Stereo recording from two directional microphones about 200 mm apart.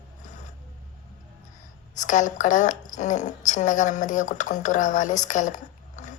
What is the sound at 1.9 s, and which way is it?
A woman's voice, 40° left (ahead or behind).